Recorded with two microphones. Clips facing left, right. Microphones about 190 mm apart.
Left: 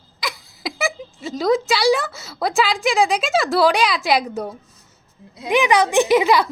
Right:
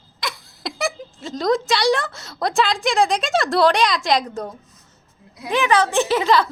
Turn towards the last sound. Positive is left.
turn(degrees=10)  # may be behind; listen again after turning